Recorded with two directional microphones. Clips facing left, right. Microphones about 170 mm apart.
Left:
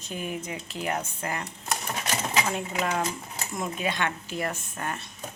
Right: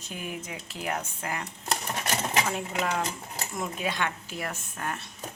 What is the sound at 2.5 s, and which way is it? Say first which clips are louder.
Speech: left 1 dB; centre (ahead or behind).